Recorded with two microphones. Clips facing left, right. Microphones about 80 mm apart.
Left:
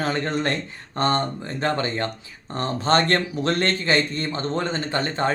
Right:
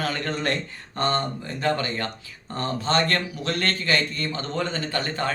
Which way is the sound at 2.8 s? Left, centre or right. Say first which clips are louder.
Left 4 dB; left.